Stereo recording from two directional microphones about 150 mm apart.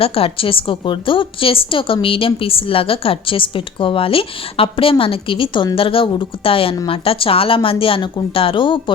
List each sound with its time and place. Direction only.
0.0 s a woman's voice: 40° left (ahead or behind)